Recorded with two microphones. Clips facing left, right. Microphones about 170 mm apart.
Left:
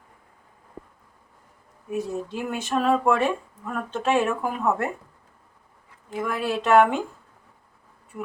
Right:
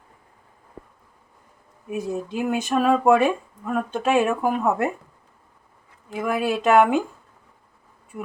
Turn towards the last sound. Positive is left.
turn(degrees=-10)  # may be behind; listen again after turning